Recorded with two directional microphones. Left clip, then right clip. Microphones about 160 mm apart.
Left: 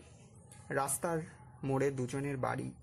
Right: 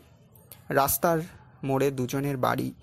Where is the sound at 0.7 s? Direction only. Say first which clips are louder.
Right 11 dB; 30° right (ahead or behind).